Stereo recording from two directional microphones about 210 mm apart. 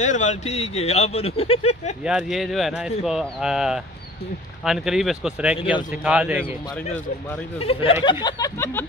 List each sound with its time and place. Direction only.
0.0 s speech: 35° left (ahead or behind)
2.0 s speech: centre (ahead or behind)
7.5 s speech: 30° left (ahead or behind)